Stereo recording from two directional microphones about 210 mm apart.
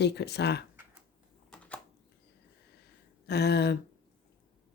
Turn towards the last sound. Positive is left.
turn(degrees=50)  # may be behind; listen again after turning